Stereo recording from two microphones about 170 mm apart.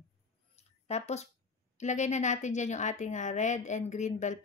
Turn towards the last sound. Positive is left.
turn(degrees=45)  # may be behind; listen again after turning